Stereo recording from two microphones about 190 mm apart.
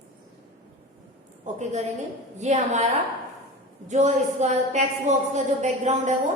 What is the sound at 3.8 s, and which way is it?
A man's voice, 35° right (ahead or behind).